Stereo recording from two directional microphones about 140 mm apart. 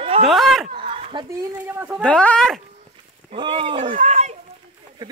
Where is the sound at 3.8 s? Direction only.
60° right (ahead or behind).